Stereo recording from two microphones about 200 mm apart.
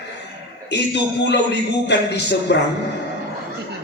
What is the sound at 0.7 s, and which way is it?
Speech, 60° left (ahead or behind).